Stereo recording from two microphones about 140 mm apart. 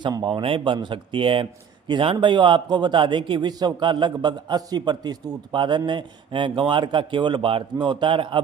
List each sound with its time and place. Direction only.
0.0 s speech: 35° right (ahead or behind)